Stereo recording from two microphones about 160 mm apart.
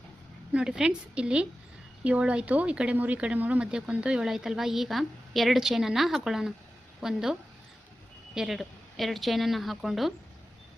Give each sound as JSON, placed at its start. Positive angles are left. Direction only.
{"t": 0.5, "sound": "a woman's voice", "side_deg": -5}
{"t": 8.4, "sound": "speech", "side_deg": 0}